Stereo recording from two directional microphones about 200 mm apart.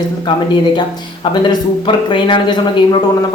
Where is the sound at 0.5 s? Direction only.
25° left (ahead or behind).